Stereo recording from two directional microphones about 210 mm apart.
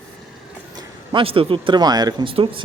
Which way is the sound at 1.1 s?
25° right (ahead or behind).